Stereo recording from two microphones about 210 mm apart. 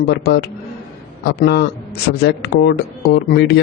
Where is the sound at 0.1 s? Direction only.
50° left (ahead or behind).